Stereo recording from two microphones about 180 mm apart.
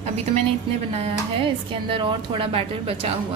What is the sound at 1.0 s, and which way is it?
Speech, 30° right (ahead or behind).